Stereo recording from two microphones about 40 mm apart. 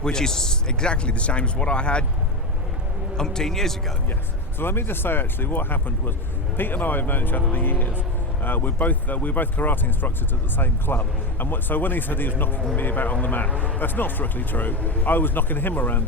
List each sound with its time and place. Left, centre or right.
0.0 s speech: centre
3.2 s speech: centre
4.6 s a man's voice: left
13.7 s a man's voice: left